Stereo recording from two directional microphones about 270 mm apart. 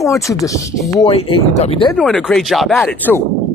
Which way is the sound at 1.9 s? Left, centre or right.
Centre.